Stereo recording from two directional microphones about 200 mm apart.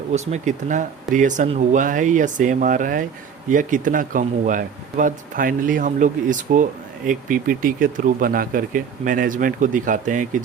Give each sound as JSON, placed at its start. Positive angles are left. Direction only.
{"t": 0.1, "sound": "speech", "side_deg": -35}